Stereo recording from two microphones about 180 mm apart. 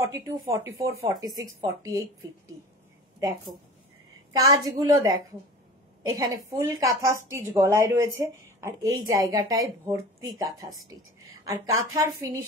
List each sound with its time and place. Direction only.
0.0 s speech: 15° right (ahead or behind)
4.3 s a woman's voice: 20° right (ahead or behind)